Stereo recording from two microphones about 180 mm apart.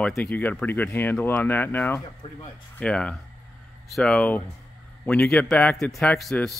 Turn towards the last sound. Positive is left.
turn(degrees=0)  # may be behind; listen again after turning